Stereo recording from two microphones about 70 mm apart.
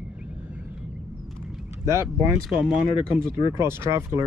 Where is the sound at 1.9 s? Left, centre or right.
Right.